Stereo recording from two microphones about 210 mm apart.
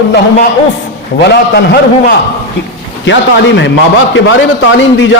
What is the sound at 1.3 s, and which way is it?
Speech, 50° left (ahead or behind).